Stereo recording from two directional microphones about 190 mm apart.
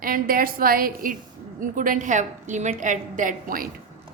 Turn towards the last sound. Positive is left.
turn(degrees=-45)  # may be behind; listen again after turning